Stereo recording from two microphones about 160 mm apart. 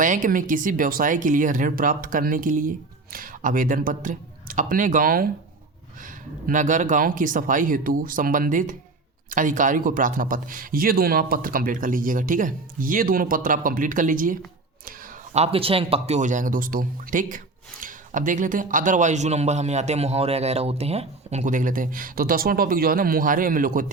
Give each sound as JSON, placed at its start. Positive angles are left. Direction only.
{"t": 0.0, "sound": "speech", "side_deg": -55}
{"t": 15.3, "sound": "speech", "side_deg": -40}